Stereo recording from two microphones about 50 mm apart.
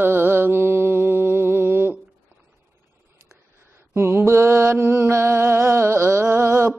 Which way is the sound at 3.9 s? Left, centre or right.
Right.